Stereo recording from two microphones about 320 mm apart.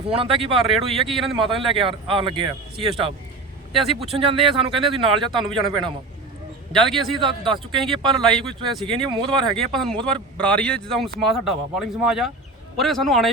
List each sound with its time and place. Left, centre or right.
0.1 s speech: centre
0.7 s speech: centre
1.2 s speech: centre
4.0 s speech: centre
6.7 s speech: centre
7.2 s speech: centre
7.8 s speech: centre
8.8 s speech: centre
9.6 s speech: centre